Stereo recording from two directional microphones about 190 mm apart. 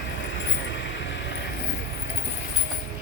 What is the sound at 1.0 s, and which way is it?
Mechanisms, 70° left (ahead or behind).